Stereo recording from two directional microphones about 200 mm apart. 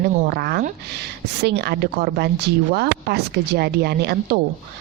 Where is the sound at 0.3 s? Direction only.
50° right (ahead or behind).